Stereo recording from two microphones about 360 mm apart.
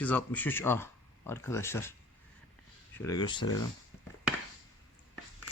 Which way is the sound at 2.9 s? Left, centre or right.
Centre.